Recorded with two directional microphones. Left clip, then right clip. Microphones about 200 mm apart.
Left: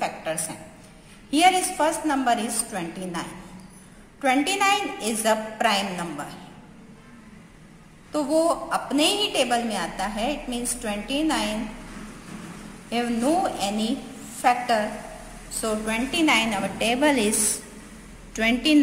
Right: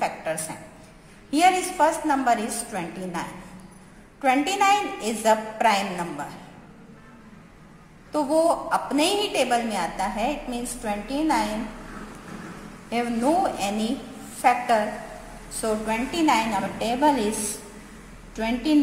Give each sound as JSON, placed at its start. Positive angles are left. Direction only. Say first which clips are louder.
{"t": 0.0, "sound": "a sound", "louder": "right 1 dB", "side_deg": 10}
{"t": 1.3, "sound": "a woman's voice", "louder": "left 1 dB", "side_deg": 10}
{"t": 8.1, "sound": "a woman's voice", "louder": "right 1 dB", "side_deg": 10}
{"t": 12.9, "sound": "a woman's voice", "louder": "right 1 dB", "side_deg": 10}
{"t": 15.6, "sound": "a woman's voice", "louder": "right 1 dB", "side_deg": 20}
{"t": 18.3, "sound": "a woman's voice", "louder": "left 3 dB", "side_deg": 30}